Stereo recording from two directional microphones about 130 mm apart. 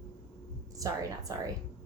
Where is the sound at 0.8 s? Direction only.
25° right (ahead or behind).